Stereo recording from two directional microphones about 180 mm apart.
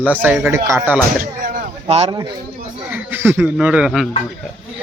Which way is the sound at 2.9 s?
10° right (ahead or behind).